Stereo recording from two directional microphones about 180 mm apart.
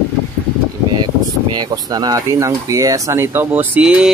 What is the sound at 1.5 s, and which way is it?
Speech, 20° right (ahead or behind).